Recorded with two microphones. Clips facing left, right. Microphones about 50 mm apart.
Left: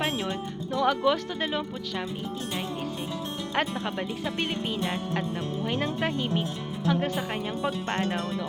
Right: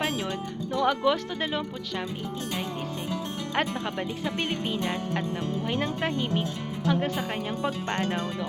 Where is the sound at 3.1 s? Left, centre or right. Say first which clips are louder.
Right 1 dB; centre.